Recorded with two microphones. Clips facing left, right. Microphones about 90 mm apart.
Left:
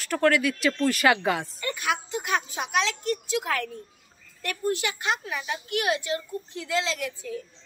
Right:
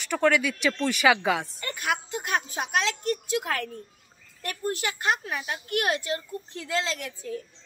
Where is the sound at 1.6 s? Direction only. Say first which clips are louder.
Left 1 dB; 45° right (ahead or behind).